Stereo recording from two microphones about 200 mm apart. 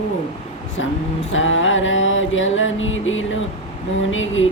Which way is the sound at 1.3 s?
75° left (ahead or behind).